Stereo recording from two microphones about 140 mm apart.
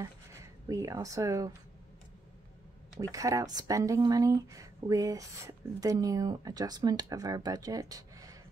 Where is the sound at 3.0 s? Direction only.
25° right (ahead or behind).